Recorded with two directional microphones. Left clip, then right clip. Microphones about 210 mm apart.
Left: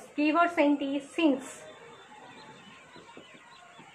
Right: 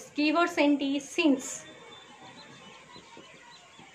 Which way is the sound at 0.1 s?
35° right (ahead or behind).